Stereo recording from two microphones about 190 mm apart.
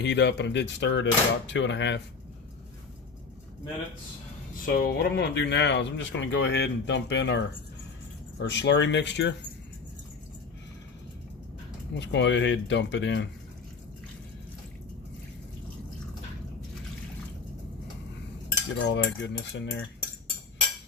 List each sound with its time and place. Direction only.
0.0 s speech: 65° left (ahead or behind)
4.6 s speech: 50° left (ahead or behind); by 9.3 s 65° left (ahead or behind)
11.9 s speech: 70° left (ahead or behind)
18.8 s speech: 70° left (ahead or behind)